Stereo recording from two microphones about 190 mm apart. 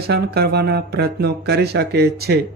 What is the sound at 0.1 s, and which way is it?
Speech, 55° right (ahead or behind).